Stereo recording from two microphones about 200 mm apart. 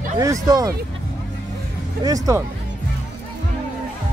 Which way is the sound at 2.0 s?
15° right (ahead or behind).